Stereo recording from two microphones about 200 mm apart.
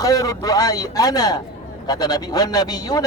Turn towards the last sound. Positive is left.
turn(degrees=20)  # may be behind; listen again after turning